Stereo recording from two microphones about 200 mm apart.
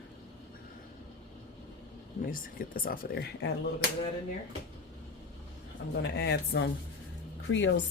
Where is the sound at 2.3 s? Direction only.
45° left (ahead or behind).